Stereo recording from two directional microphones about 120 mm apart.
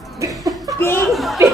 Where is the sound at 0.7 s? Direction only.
20° left (ahead or behind).